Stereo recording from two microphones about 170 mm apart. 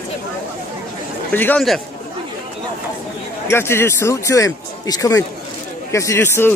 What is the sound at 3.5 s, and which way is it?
Speech, 15° left (ahead or behind).